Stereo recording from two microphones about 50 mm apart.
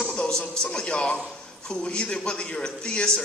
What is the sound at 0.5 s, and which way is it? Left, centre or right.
A man's voice, centre.